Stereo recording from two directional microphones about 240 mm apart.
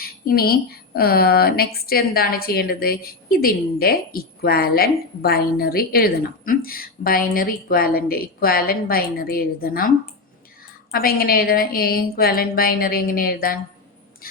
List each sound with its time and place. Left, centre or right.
0.0 s speech: left
10.9 s speech: left